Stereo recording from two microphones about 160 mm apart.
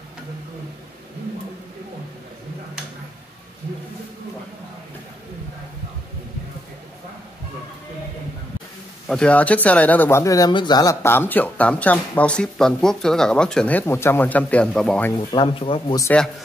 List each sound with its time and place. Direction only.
9.0 s speech: 5° left (ahead or behind)
15.1 s speech: 30° left (ahead or behind)
16.0 s speech: 10° left (ahead or behind)